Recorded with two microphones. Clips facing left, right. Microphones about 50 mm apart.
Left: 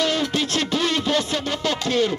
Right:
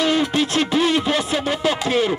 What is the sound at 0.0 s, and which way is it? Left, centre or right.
Music, centre.